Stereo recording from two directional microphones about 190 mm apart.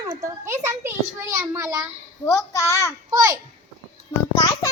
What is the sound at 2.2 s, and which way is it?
Speech, 15° left (ahead or behind).